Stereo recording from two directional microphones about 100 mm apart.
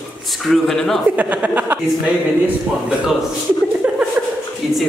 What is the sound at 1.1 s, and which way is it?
Speech, 15° right (ahead or behind).